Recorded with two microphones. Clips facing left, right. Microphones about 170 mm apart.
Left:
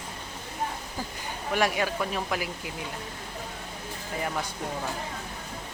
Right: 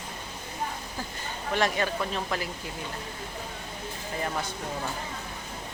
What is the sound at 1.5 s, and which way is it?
Speech, 10° left (ahead or behind).